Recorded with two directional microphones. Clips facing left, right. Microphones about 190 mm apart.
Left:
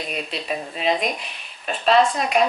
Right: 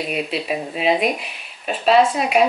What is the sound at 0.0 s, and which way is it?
Speech, 5° right (ahead or behind).